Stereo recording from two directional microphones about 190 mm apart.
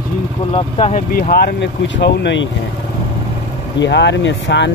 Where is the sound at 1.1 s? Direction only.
50° left (ahead or behind).